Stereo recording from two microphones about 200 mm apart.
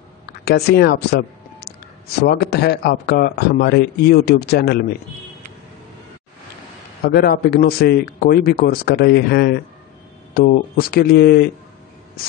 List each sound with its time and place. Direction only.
0.5 s speech: 55° left (ahead or behind)
2.1 s speech: 50° left (ahead or behind)
7.1 s speech: 50° left (ahead or behind)